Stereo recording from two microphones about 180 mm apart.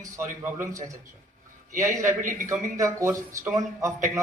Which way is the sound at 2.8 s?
15° right (ahead or behind).